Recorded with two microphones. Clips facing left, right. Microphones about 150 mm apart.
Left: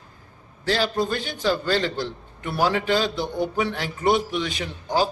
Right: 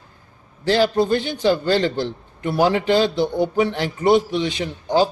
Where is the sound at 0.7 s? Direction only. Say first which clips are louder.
Right 6 dB; 30° right (ahead or behind).